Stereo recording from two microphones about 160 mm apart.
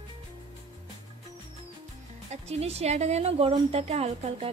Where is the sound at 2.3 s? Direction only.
40° right (ahead or behind).